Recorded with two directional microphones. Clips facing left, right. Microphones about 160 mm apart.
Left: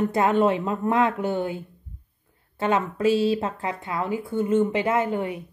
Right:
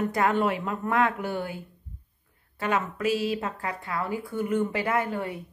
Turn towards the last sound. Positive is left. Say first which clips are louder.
# left 4 dB
turn(degrees=20)  # may be behind; listen again after turning